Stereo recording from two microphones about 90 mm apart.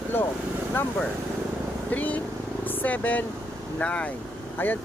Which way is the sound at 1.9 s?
20° left (ahead or behind).